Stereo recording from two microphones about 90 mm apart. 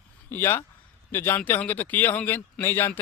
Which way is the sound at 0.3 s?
25° left (ahead or behind).